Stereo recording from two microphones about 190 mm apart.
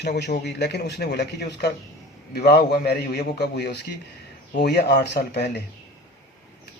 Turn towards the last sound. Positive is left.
turn(degrees=60)  # may be behind; listen again after turning